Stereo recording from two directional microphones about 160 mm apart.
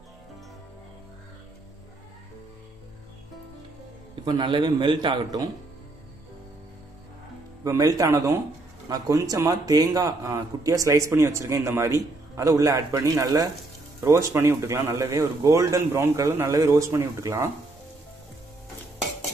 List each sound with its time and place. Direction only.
4.1 s a man's voice: 30° right (ahead or behind)
7.6 s a man's voice: 20° right (ahead or behind)